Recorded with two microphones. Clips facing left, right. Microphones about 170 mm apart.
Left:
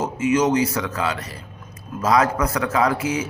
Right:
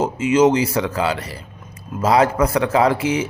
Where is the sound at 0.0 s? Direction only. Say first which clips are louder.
Right 4 dB; 30° right (ahead or behind).